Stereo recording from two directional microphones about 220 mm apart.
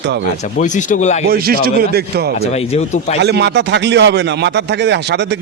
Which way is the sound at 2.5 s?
30° left (ahead or behind).